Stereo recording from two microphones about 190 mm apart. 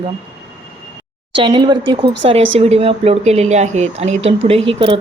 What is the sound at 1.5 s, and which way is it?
Speech, 25° right (ahead or behind).